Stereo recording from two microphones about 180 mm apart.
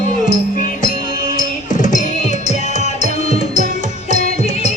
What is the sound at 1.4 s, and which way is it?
Music, 45° left (ahead or behind).